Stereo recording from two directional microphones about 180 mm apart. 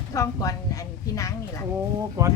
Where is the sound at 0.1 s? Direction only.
20° left (ahead or behind).